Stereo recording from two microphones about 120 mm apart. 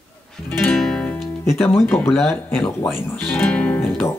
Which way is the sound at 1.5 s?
20° left (ahead or behind).